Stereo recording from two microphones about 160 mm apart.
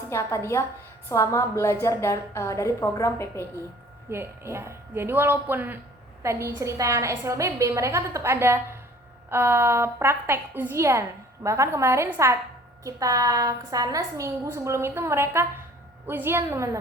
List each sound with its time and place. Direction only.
0.1 s a woman's voice: 15° left (ahead or behind)
4.1 s a woman's voice: 15° right (ahead or behind)